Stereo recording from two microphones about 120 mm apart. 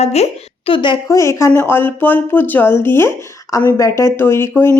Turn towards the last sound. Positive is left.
turn(degrees=20)  # may be behind; listen again after turning